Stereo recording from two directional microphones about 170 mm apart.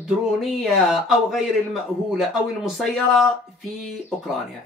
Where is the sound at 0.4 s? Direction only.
Centre (ahead or behind).